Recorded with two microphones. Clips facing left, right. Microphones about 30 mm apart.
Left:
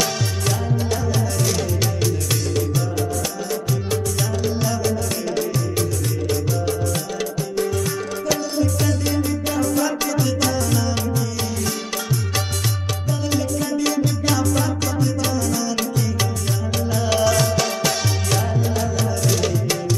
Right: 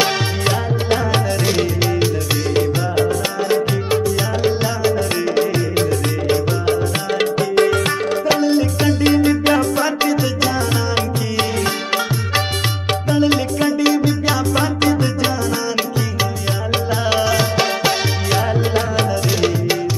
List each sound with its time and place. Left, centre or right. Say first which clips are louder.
0.0 s music: right 5 dB; right
1.5 s music: right 5 dB; right
3.9 s music: right 6 dB; right
8.3 s music: right 5 dB; right
11.0 s music: right 5 dB; right
14.5 s music: right 6 dB; right
16.7 s music: right 4 dB; right
18.5 s music: right 5 dB; right
19.2 s music: right 4 dB; right